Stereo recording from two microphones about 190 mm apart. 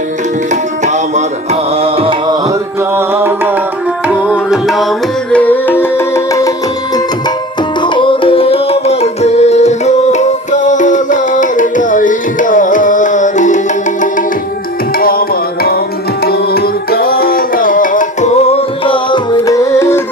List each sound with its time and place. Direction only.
1.8 s music: 30° right (ahead or behind)
2.9 s music: 10° right (ahead or behind); by 6.5 s 15° left (ahead or behind)
7.8 s music: 25° left (ahead or behind)
16.2 s music: 55° left (ahead or behind)
18.9 s music: 25° left (ahead or behind)